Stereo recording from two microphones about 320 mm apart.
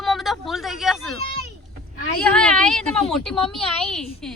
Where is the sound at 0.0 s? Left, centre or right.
Centre.